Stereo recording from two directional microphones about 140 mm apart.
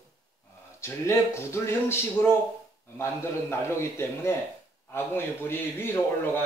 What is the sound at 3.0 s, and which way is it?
A man's voice, 20° left (ahead or behind).